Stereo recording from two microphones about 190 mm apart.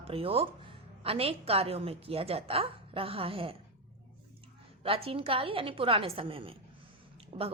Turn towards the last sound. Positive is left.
turn(degrees=-30)  # may be behind; listen again after turning